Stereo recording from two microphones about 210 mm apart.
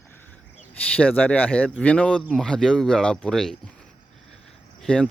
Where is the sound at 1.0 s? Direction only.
5° left (ahead or behind).